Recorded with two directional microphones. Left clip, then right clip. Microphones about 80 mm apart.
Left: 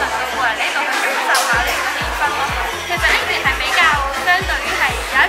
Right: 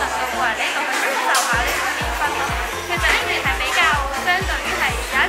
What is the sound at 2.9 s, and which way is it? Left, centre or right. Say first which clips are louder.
Music: left 2 dB; centre.